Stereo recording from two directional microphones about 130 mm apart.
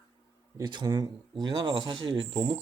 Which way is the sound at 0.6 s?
35° right (ahead or behind).